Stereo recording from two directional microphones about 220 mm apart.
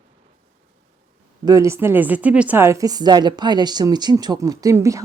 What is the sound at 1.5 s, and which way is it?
A woman's voice, 15° right (ahead or behind).